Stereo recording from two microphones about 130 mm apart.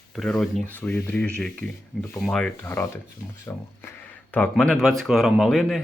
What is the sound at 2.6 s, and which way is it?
Speech, 20° left (ahead or behind).